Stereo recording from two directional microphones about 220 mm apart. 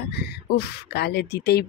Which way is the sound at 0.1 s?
50° left (ahead or behind).